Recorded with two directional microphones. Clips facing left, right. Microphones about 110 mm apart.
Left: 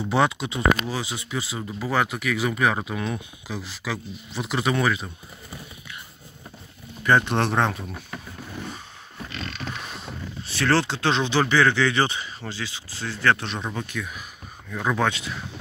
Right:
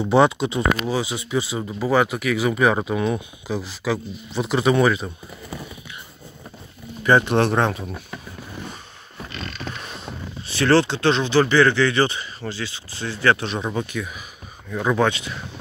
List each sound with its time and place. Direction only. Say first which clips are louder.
0.1 s speech: right 6 dB; 30° right (ahead or behind)
0.9 s speech: right 6 dB; 15° right (ahead or behind)
2.6 s speech: right 5 dB; 25° right (ahead or behind)
7.0 s speech: right 4 dB; 10° right (ahead or behind)
9.7 s speech: right 2 dB; 5° left (ahead or behind)
15.0 s speech: right 3 dB; centre (ahead or behind)